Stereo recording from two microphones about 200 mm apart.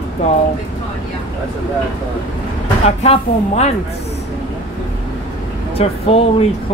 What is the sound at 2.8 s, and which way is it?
Speech, 30° left (ahead or behind).